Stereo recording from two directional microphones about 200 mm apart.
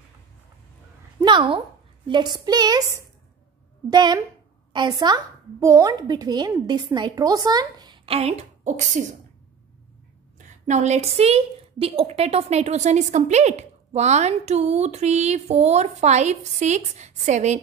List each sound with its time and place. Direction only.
1.2 s a sound: 25° right (ahead or behind)
2.0 s a woman's voice: 20° right (ahead or behind)
3.9 s a woman's voice: 20° right (ahead or behind); by 9.0 s 35° right (ahead or behind)
10.4 s a woman's voice: 35° right (ahead or behind)